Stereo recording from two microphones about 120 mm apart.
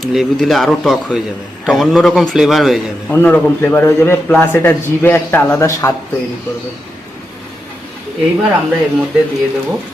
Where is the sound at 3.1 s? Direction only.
15° left (ahead or behind).